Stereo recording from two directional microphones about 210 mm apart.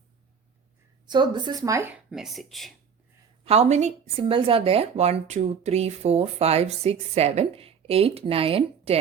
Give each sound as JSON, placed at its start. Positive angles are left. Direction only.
{"t": 1.0, "sound": "speech", "side_deg": -20}
{"t": 2.0, "sound": "speech", "side_deg": 0}
{"t": 3.4, "sound": "speech", "side_deg": -30}